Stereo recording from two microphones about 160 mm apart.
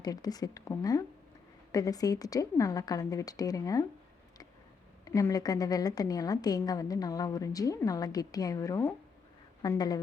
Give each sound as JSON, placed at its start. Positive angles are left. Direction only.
{"t": 0.0, "sound": "a woman's voice", "side_deg": 25}
{"t": 5.0, "sound": "a woman's voice", "side_deg": 20}